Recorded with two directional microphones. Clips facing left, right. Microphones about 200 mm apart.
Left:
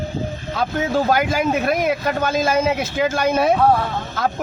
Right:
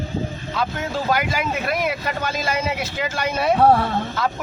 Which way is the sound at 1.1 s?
45° left (ahead or behind).